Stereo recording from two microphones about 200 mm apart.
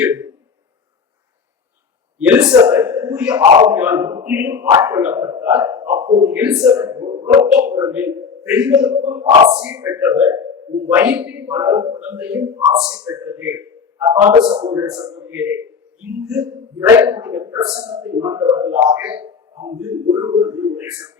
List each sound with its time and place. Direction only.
0.0 s speech: 10° right (ahead or behind)
2.1 s speech: 5° right (ahead or behind)
2.5 s a man's voice: 15° right (ahead or behind)